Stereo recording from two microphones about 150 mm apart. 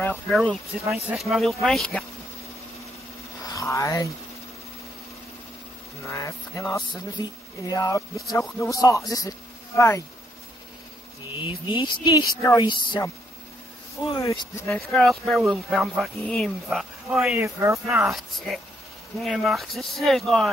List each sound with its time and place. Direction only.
0.3 s speech: 5° left (ahead or behind)
3.4 s speech: 20° left (ahead or behind)
6.0 s speech: 20° left (ahead or behind)
11.4 s speech: 30° left (ahead or behind)
14.1 s speech: 30° left (ahead or behind)
14.7 s speech: 5° left (ahead or behind)